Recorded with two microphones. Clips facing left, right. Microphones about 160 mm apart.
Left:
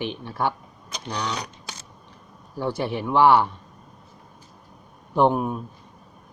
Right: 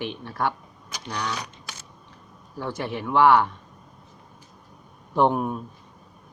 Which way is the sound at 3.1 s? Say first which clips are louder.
Left 1 dB; 30° left (ahead or behind).